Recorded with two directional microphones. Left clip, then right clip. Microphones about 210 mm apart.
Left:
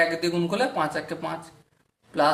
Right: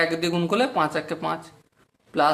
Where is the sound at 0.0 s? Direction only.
35° right (ahead or behind).